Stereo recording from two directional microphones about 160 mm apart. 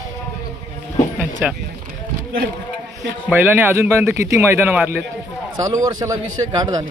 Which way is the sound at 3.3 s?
10° right (ahead or behind).